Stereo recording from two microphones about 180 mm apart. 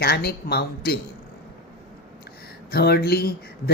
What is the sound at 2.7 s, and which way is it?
Speech, 60° left (ahead or behind).